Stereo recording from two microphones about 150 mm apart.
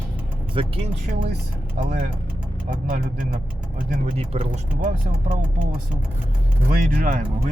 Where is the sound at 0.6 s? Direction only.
40° right (ahead or behind).